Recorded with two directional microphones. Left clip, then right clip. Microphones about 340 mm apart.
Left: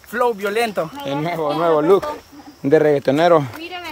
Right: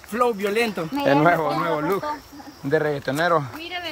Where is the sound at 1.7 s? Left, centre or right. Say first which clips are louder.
Left 8 dB; left.